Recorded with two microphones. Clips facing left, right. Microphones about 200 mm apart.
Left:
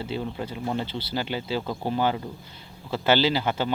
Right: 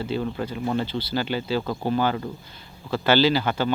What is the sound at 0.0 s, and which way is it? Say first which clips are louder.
Speech: right 4 dB; 20° left (ahead or behind).